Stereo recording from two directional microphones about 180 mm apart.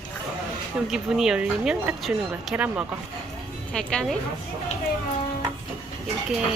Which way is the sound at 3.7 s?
5° left (ahead or behind).